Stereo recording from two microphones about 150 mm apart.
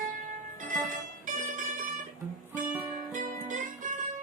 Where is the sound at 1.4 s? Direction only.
60° right (ahead or behind).